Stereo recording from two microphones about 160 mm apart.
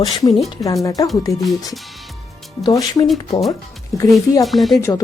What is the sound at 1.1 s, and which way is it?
Speech, 20° left (ahead or behind).